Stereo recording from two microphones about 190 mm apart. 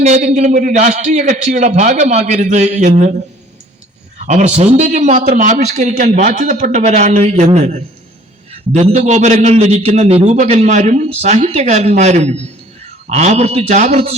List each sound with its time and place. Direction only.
0.0 s a man's voice: 35° right (ahead or behind)
4.2 s a man's voice: 40° right (ahead or behind)